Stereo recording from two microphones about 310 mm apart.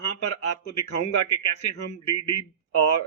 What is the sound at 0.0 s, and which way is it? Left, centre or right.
A man's voice, left.